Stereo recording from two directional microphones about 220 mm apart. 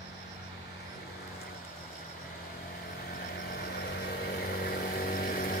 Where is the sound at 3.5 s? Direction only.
50° left (ahead or behind).